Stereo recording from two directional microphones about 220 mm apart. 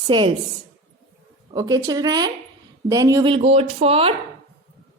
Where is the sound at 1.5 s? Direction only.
15° right (ahead or behind).